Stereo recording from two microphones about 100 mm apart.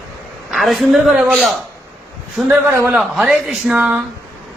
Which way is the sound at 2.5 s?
25° right (ahead or behind).